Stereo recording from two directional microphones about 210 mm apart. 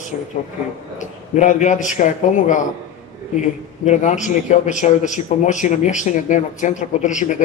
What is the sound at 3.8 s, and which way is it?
A man's voice, 35° left (ahead or behind).